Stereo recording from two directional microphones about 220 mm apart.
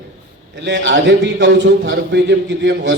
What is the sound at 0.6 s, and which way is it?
A man's voice, 55° right (ahead or behind).